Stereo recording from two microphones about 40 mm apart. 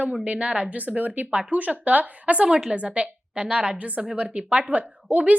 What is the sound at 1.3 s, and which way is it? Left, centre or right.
A woman's voice, right.